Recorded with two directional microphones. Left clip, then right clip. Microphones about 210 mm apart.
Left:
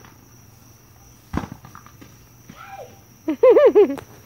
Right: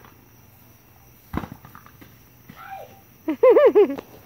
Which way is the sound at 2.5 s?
25° right (ahead or behind).